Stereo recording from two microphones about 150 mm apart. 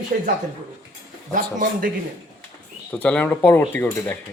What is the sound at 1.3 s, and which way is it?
Speech, 65° right (ahead or behind).